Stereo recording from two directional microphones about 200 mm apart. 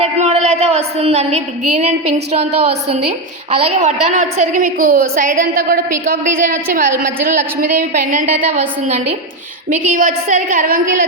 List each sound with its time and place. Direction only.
0.0 s a woman's voice: 35° right (ahead or behind)
9.6 s a woman's voice: 40° right (ahead or behind)